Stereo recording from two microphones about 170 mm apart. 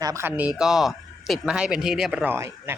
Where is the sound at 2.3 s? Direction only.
15° right (ahead or behind).